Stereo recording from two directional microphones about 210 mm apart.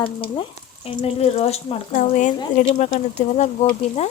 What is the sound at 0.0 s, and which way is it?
Speech, 25° left (ahead or behind).